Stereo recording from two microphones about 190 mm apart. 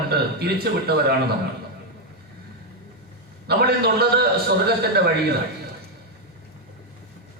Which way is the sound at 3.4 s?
55° right (ahead or behind).